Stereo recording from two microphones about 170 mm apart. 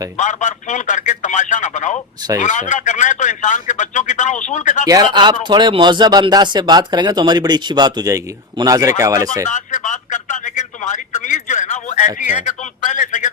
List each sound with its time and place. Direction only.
0.2 s speech: 45° left (ahead or behind)
4.9 s speech: 25° right (ahead or behind)
9.4 s radio: 50° left (ahead or behind)
12.5 s speech: 50° left (ahead or behind)